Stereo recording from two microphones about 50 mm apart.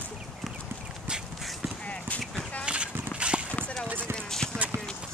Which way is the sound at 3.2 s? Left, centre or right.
Right.